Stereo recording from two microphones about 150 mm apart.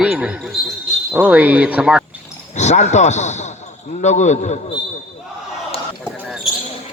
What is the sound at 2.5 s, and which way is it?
A man's voice, 50° left (ahead or behind).